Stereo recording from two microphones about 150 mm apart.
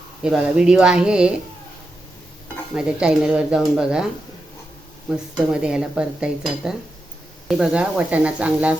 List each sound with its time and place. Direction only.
0.2 s speech: 5° right (ahead or behind)
2.7 s speech: 5° right (ahead or behind)
5.1 s speech: 5° right (ahead or behind)